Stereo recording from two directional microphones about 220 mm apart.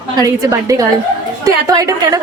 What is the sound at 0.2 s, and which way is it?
A woman's voice, 15° right (ahead or behind).